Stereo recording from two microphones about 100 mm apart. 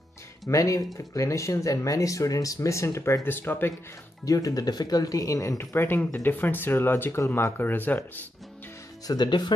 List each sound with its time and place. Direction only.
0.5 s speech: 35° left (ahead or behind)
4.2 s speech: 35° left (ahead or behind); by 8.0 s 20° left (ahead or behind)
9.0 s speech: 45° left (ahead or behind)